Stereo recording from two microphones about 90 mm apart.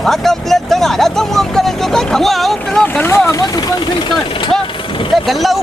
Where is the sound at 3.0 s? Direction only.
30° left (ahead or behind).